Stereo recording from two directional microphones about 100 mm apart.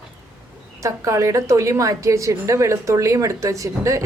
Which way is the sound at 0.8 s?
30° right (ahead or behind).